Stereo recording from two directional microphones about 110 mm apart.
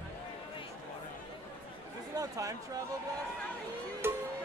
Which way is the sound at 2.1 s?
30° right (ahead or behind).